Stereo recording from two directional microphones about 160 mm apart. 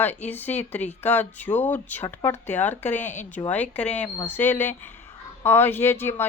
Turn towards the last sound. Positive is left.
turn(degrees=15)  # may be behind; listen again after turning